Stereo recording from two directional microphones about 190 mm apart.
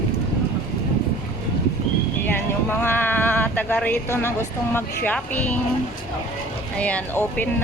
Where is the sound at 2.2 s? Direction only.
10° left (ahead or behind).